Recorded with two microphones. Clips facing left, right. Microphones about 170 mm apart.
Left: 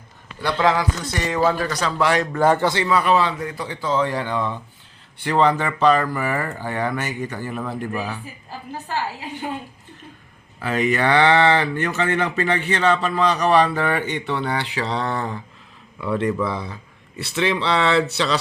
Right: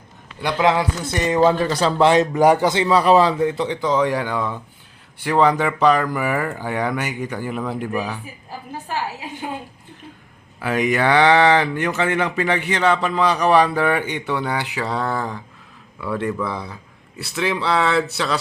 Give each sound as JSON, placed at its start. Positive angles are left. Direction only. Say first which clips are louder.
{"t": 0.4, "sound": "speech", "louder": "right 1 dB", "side_deg": -15}
{"t": 2.9, "sound": "speech", "louder": "right 6 dB", "side_deg": -35}
{"t": 10.6, "sound": "speech", "louder": "right 1 dB", "side_deg": -10}